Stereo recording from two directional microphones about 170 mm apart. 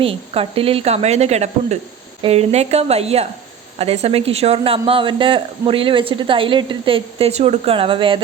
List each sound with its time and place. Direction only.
0.0 s speech: 35° right (ahead or behind)